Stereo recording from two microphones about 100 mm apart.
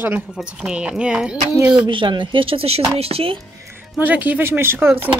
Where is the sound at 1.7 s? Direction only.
55° right (ahead or behind); by 3.3 s 75° right (ahead or behind).